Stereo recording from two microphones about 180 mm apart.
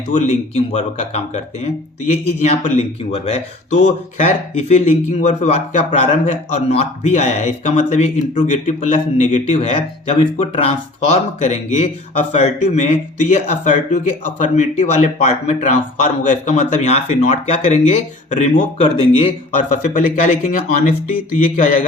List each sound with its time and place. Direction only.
0.1 s a man's voice: 40° left (ahead or behind)
2.4 s a man's voice: 40° left (ahead or behind)
19.8 s speech: 50° left (ahead or behind)